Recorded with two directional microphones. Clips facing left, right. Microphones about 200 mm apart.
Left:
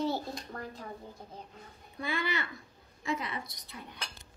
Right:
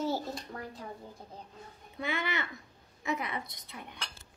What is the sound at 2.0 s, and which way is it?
A woman's voice, 20° right (ahead or behind).